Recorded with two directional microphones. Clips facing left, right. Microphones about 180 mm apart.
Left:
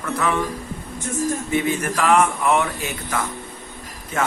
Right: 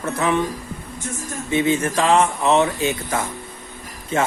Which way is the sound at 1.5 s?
25° right (ahead or behind).